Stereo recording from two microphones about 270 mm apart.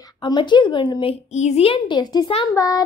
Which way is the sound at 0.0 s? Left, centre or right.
Centre.